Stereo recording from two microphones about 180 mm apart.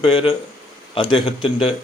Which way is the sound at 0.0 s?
30° left (ahead or behind).